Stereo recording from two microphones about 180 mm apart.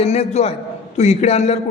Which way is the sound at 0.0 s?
35° left (ahead or behind).